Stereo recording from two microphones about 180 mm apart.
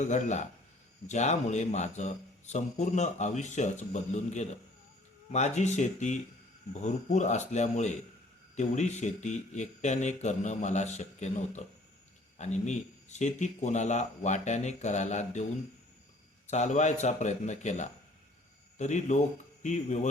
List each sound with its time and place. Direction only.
0.0 s speech: 40° left (ahead or behind)
16.5 s speech: 40° left (ahead or behind)